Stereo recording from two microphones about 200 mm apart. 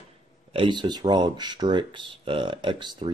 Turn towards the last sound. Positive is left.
turn(degrees=-20)  # may be behind; listen again after turning